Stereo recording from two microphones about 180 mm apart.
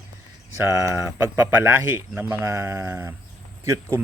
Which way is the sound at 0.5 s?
15° right (ahead or behind).